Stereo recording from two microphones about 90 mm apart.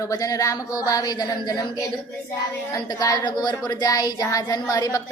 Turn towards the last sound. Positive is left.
turn(degrees=45)  # may be behind; listen again after turning